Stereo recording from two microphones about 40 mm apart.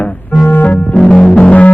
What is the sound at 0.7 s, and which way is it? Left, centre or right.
Music, left.